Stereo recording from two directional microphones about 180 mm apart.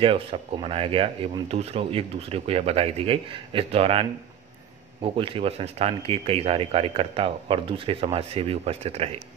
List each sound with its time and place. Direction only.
0.0 s speech: 30° right (ahead or behind)